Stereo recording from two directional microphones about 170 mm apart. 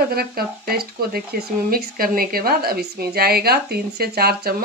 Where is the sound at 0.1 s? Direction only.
65° right (ahead or behind).